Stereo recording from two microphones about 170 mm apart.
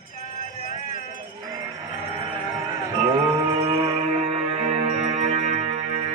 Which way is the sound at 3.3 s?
30° right (ahead or behind).